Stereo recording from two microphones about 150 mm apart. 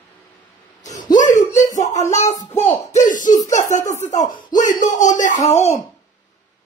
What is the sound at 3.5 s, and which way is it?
Speech, 55° left (ahead or behind).